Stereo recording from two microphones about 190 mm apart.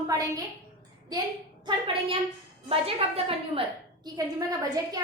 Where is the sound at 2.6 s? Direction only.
30° right (ahead or behind).